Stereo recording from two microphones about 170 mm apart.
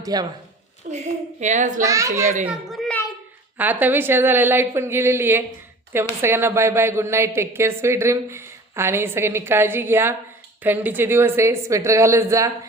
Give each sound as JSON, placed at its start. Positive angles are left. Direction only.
{"t": 0.0, "sound": "a woman's voice", "side_deg": -25}
{"t": 0.9, "sound": "a child's voice", "side_deg": -45}
{"t": 1.8, "sound": "a child's voice", "side_deg": -20}
{"t": 2.5, "sound": "a sound", "side_deg": 0}
{"t": 3.6, "sound": "speech", "side_deg": -10}